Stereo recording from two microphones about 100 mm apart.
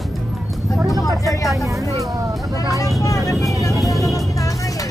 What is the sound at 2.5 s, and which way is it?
Speech, 35° left (ahead or behind).